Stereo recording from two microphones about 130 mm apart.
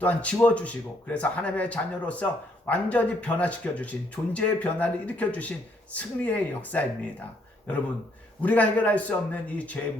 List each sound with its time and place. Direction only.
0.0 s speech: 10° left (ahead or behind)
8.4 s speech: 10° left (ahead or behind)